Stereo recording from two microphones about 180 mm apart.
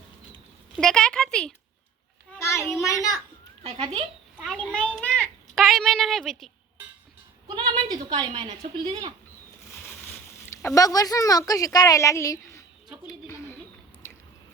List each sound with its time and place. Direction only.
0.8 s speech: 5° left (ahead or behind)
2.3 s a child's voice: 15° left (ahead or behind)
3.6 s speech: 35° right (ahead or behind)
4.4 s a child's voice: 5° left (ahead or behind)
7.4 s speech: 25° right (ahead or behind)
10.8 s a woman's voice: 20° left (ahead or behind)